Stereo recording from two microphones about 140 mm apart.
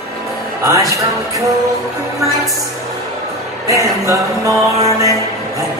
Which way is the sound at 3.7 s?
25° right (ahead or behind).